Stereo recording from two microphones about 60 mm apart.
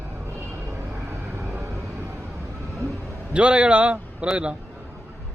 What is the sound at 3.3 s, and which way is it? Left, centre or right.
A man's voice, centre.